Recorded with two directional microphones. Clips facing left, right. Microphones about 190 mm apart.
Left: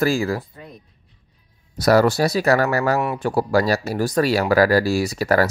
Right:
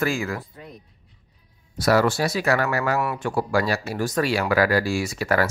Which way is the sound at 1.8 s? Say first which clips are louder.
Left 4 dB; 40° left (ahead or behind).